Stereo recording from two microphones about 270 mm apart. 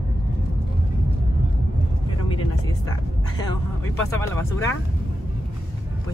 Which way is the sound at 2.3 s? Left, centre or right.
Centre.